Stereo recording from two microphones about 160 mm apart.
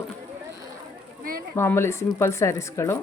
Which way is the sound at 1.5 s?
15° left (ahead or behind).